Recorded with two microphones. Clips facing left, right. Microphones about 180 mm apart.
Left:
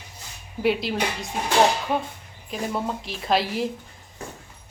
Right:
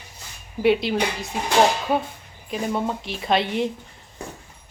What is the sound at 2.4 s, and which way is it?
Speech, centre (ahead or behind).